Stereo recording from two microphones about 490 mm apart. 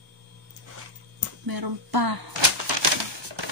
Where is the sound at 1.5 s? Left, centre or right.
Right.